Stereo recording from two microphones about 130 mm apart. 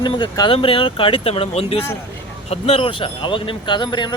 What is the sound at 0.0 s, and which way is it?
Speech, 35° left (ahead or behind).